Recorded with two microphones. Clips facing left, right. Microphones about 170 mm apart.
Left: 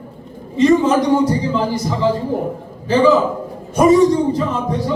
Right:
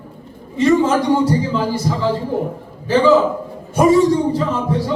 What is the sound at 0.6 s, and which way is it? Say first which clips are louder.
A man's voice: left 1 dB; 15° left (ahead or behind).